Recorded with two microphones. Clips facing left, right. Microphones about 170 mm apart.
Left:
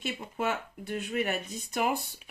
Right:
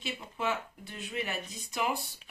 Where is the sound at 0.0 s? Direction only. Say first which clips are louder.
Left 3 dB; 50° left (ahead or behind).